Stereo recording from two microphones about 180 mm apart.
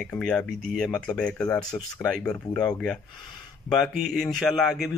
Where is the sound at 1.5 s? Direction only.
20° left (ahead or behind).